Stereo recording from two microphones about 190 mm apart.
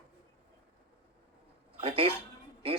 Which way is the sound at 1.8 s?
30° right (ahead or behind).